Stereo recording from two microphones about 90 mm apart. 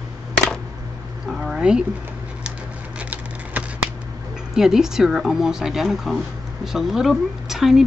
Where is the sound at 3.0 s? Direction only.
20° right (ahead or behind).